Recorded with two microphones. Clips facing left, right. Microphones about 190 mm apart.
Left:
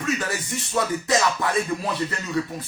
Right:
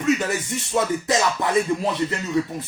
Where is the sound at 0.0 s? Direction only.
20° right (ahead or behind).